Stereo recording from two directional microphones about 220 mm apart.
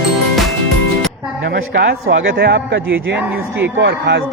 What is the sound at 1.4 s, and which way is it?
Speech, 50° right (ahead or behind).